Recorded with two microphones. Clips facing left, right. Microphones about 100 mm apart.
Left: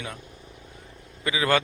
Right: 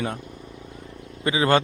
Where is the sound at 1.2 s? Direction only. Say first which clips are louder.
Right 4 dB; 30° right (ahead or behind).